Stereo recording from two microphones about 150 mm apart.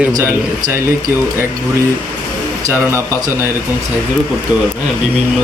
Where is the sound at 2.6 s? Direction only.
20° right (ahead or behind).